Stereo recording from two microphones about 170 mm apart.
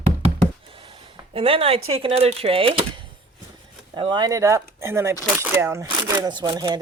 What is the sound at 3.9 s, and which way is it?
Speech, 25° right (ahead or behind).